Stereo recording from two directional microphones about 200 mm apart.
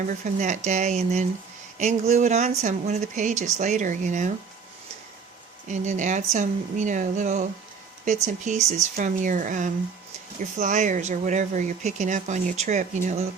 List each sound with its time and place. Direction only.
0.1 s speech: 40° right (ahead or behind)
5.6 s speech: 35° right (ahead or behind)